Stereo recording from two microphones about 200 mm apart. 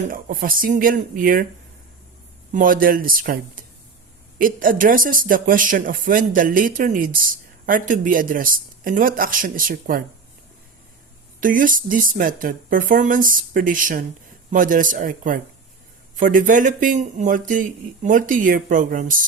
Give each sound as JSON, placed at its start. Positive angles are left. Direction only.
{"t": 0.1, "sound": "speech", "side_deg": -45}
{"t": 2.5, "sound": "speech", "side_deg": -45}
{"t": 11.3, "sound": "speech", "side_deg": -45}